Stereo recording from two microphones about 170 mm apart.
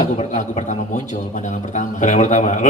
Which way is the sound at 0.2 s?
40° left (ahead or behind).